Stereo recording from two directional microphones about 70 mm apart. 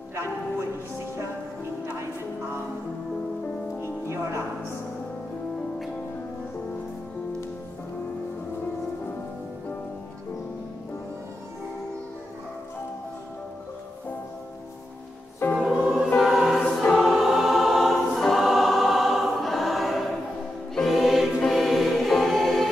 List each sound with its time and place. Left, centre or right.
3.8 s music: right
15.4 s music: left
15.8 s choir: centre
20.7 s music: centre